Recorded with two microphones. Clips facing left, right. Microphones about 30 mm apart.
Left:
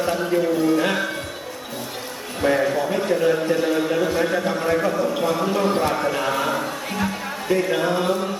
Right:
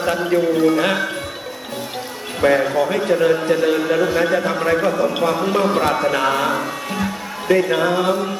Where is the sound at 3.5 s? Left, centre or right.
Right.